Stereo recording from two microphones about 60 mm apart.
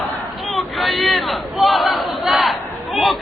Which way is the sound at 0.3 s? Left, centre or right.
Centre.